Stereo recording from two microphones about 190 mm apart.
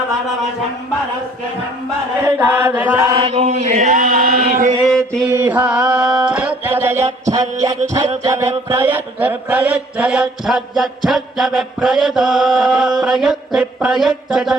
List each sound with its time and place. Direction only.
2.2 s chant: 10° right (ahead or behind)
3.2 s chant: 30° right (ahead or behind)
4.9 s mantra: centre (ahead or behind)
5.4 s mantra: 10° right (ahead or behind)